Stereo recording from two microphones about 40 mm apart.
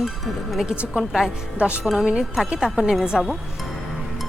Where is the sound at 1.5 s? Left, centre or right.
Right.